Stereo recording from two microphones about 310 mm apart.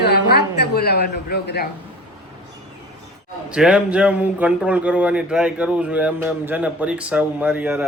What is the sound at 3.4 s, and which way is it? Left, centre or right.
Speech, centre.